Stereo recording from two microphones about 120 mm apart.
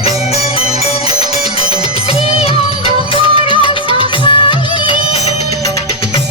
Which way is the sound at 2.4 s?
55° left (ahead or behind).